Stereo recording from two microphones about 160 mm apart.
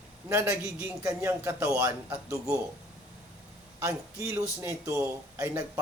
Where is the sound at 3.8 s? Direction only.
15° right (ahead or behind).